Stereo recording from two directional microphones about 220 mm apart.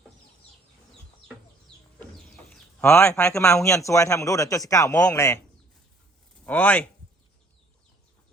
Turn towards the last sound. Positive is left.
turn(degrees=5)  # may be behind; listen again after turning